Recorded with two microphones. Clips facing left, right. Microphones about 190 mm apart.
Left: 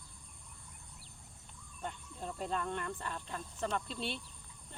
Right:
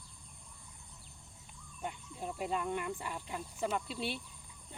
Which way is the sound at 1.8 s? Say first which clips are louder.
Right 2 dB; 10° right (ahead or behind).